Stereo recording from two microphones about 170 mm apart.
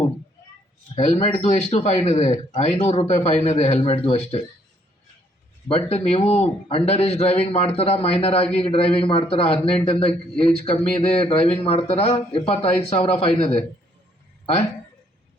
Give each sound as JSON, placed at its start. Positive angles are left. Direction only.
{"t": 0.9, "sound": "a man's voice", "side_deg": 35}
{"t": 5.6, "sound": "a man's voice", "side_deg": 35}